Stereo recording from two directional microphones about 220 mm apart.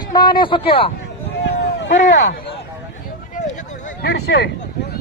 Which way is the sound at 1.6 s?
50° left (ahead or behind).